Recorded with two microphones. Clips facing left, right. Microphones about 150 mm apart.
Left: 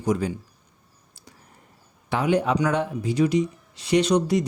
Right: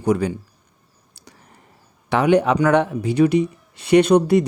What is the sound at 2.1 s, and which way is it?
Speech, 70° right (ahead or behind).